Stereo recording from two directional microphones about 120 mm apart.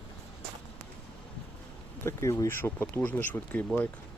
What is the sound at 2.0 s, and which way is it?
Speech, 25° left (ahead or behind).